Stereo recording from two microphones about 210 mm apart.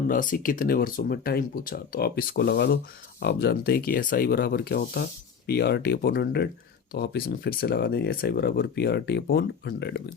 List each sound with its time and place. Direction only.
0.1 s speech: 40° left (ahead or behind)